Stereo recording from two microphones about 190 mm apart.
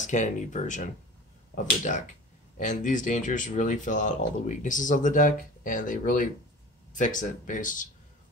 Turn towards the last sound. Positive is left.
turn(degrees=45)  # may be behind; listen again after turning